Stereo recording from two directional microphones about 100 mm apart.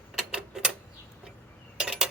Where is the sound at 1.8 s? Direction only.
5° right (ahead or behind).